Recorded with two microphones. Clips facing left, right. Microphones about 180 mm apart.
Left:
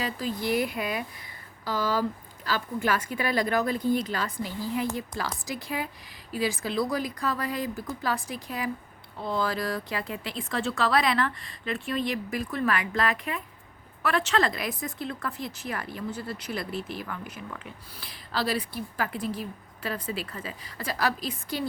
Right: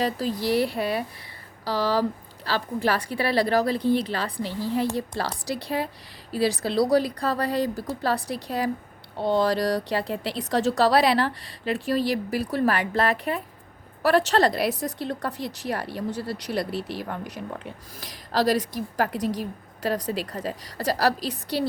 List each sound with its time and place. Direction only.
0.0 s speech: 35° right (ahead or behind)